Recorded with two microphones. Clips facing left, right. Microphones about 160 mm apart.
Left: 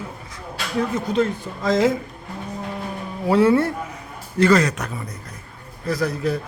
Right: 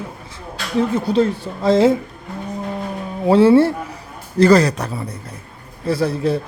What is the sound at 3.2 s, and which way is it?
Speech, 30° right (ahead or behind).